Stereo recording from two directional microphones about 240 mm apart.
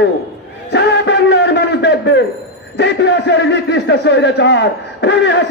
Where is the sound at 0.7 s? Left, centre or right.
Left.